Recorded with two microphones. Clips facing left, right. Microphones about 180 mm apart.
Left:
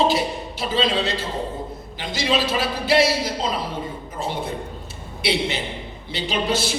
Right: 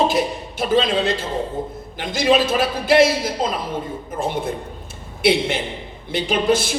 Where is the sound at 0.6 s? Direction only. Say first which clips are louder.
Right 4 dB; 50° right (ahead or behind).